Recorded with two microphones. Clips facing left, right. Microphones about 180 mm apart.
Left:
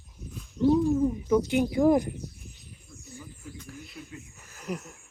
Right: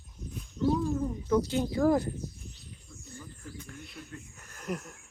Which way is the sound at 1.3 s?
15° left (ahead or behind).